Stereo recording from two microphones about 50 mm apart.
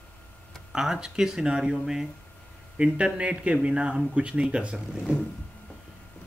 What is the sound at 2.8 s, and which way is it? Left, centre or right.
Speech, right.